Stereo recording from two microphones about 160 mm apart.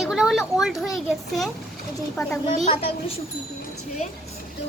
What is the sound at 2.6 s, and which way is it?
Speech, 40° left (ahead or behind).